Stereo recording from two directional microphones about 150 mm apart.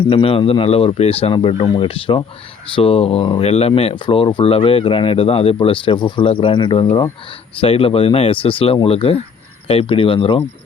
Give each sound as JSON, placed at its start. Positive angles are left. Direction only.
{"t": 0.1, "sound": "speech", "side_deg": 40}